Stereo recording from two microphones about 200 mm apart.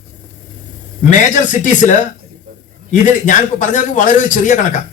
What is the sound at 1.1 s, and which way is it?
Speech, 40° left (ahead or behind).